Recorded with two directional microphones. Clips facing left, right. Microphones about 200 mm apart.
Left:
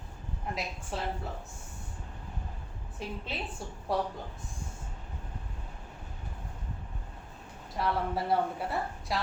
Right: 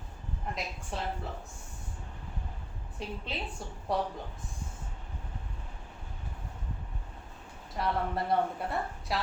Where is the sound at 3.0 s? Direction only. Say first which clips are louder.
Even; centre (ahead or behind).